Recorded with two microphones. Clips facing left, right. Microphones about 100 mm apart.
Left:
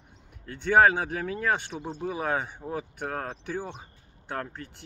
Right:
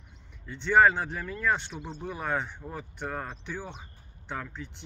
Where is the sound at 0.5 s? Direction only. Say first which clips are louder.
Left 1 dB; 50° left (ahead or behind).